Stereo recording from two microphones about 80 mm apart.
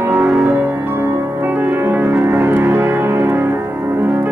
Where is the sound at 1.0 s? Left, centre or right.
Right.